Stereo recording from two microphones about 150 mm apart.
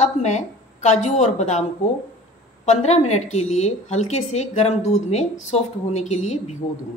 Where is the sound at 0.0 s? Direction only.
50° left (ahead or behind).